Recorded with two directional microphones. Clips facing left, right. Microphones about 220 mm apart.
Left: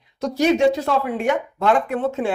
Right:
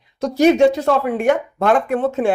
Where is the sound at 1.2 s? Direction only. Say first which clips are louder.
Right 4 dB; 50° right (ahead or behind).